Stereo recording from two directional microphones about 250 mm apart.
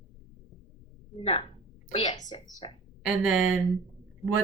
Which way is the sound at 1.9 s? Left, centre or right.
Left.